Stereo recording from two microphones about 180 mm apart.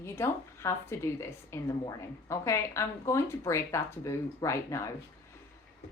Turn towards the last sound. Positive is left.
turn(degrees=15)  # may be behind; listen again after turning